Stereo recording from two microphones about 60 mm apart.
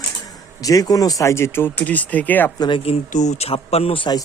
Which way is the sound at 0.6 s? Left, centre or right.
Left.